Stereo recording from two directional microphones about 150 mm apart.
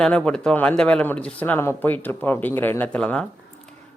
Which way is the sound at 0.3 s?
5° left (ahead or behind).